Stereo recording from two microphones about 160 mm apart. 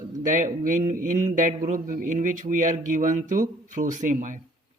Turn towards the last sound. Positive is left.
turn(degrees=-55)  # may be behind; listen again after turning